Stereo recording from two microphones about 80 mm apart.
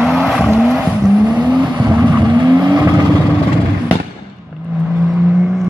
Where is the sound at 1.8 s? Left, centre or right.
Right.